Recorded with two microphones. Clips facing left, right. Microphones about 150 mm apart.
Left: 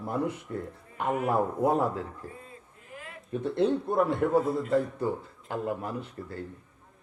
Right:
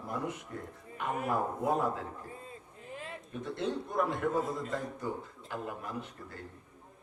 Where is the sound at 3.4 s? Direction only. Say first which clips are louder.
Left 9 dB; 30° left (ahead or behind).